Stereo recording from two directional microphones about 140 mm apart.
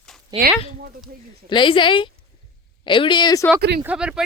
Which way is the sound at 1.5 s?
35° left (ahead or behind).